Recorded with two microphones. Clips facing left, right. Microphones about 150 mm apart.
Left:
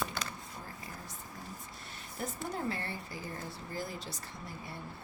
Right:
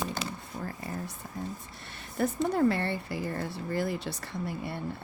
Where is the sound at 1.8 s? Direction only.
70° right (ahead or behind).